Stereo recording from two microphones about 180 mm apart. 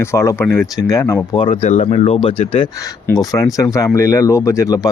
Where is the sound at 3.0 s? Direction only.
20° left (ahead or behind).